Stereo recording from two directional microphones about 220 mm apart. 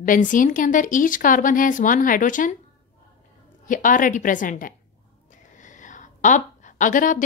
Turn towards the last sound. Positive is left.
turn(degrees=35)  # may be behind; listen again after turning